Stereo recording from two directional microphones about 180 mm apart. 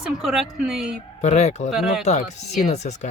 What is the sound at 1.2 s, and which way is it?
Speech, 40° left (ahead or behind).